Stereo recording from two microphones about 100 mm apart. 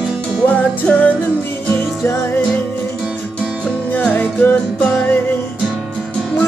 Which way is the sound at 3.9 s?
15° left (ahead or behind).